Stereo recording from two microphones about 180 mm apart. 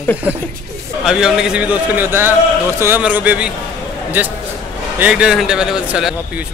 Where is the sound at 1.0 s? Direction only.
5° right (ahead or behind).